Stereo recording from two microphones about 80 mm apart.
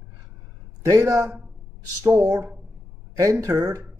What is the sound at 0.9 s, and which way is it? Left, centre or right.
Speech, right.